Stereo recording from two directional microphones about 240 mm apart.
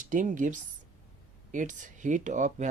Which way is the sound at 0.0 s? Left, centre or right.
Right.